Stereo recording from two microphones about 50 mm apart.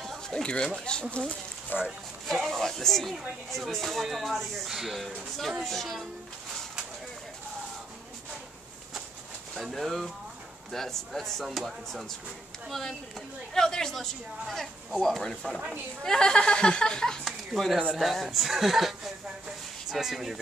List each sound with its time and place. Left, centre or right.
0.3 s speech: centre
1.9 s speech: centre
5.6 s speech: centre
9.6 s speech: centre
17.2 s speech: centre